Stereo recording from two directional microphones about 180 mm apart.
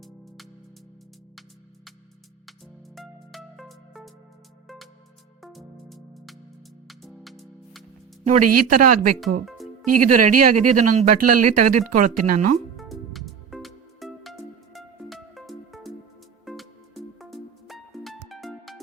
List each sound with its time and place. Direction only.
2.5 s music: centre (ahead or behind)
5.4 s music: centre (ahead or behind)
8.2 s speech: 45° right (ahead or behind)
9.2 s speech: centre (ahead or behind)
10.0 s speech: 45° right (ahead or behind)
12.5 s music: centre (ahead or behind)